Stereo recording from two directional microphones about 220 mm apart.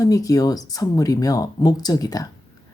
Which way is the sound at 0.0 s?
15° left (ahead or behind).